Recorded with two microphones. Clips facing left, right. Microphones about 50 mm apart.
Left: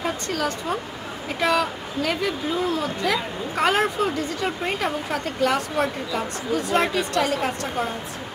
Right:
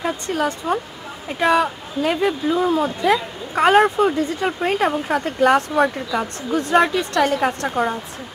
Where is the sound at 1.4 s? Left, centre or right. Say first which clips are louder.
Right 5 dB; centre.